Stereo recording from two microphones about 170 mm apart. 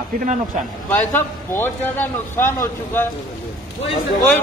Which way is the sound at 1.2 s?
15° left (ahead or behind).